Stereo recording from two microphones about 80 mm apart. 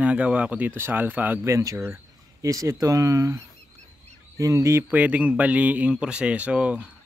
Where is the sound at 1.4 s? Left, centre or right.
Right.